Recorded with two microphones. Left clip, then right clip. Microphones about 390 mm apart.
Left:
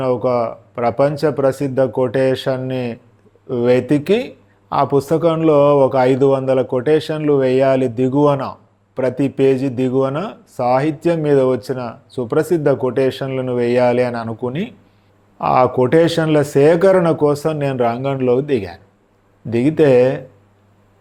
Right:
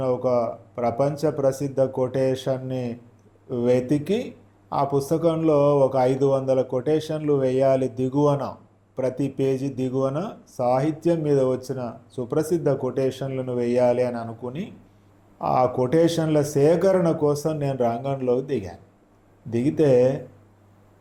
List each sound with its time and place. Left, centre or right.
0.0 s speech: left